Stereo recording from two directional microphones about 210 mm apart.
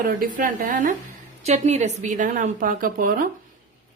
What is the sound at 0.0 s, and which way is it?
A woman's voice, 45° right (ahead or behind).